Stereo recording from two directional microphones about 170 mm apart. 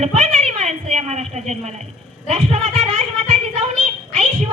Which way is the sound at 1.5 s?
40° right (ahead or behind).